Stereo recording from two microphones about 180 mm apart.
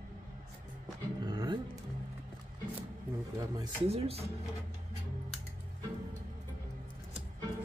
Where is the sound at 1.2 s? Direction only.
25° right (ahead or behind).